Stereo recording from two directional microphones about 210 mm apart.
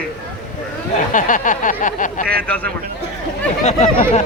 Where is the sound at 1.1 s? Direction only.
40° left (ahead or behind).